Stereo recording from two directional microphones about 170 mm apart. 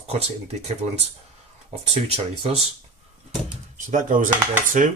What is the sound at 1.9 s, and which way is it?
Speech, 35° right (ahead or behind).